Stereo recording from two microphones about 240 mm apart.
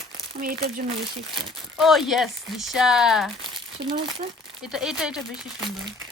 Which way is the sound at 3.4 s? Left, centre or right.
Centre.